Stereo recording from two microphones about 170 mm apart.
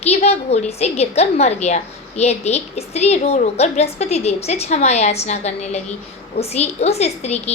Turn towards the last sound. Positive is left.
turn(degrees=40)  # may be behind; listen again after turning